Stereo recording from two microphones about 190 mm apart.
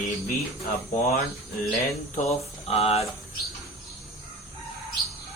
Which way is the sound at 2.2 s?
35° left (ahead or behind).